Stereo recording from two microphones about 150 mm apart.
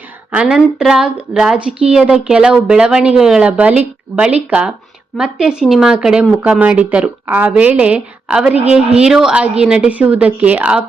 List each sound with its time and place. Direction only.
0.3 s a woman's voice: 5° right (ahead or behind)